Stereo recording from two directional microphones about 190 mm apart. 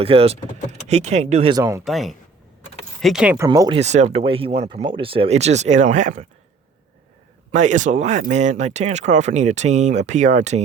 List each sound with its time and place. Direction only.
0.0 s speech: 30° right (ahead or behind)
1.5 s speech: 15° right (ahead or behind)
1.8 s speech: centre (ahead or behind); by 3.8 s 15° right (ahead or behind)
3.8 s speech: 35° right (ahead or behind)
7.5 s speech: 40° right (ahead or behind)